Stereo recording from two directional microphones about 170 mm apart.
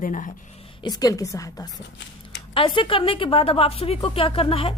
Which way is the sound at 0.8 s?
20° left (ahead or behind).